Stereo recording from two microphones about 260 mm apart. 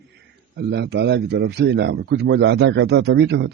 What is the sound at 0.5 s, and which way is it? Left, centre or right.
Speech, right.